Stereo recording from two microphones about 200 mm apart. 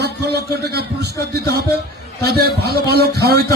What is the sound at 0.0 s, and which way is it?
A man's voice, 55° right (ahead or behind).